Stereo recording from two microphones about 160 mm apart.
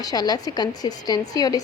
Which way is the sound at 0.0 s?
25° left (ahead or behind).